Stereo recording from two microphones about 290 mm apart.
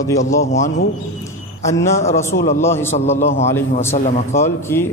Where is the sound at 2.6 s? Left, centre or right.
Centre.